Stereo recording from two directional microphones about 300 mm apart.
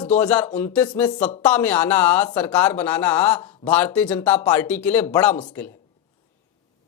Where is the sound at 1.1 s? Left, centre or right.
Left.